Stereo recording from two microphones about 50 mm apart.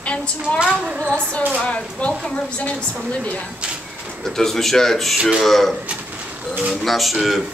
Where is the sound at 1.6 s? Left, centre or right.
Left.